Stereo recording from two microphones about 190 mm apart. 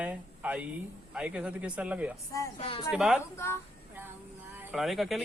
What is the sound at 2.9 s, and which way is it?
Speech, 5° right (ahead or behind).